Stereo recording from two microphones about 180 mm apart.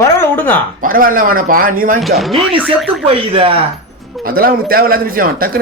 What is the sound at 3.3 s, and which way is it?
Speech, 30° right (ahead or behind).